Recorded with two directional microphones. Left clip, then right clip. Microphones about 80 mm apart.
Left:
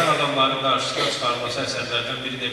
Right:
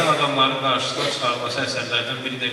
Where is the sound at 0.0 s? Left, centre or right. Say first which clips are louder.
Right 1 dB; right.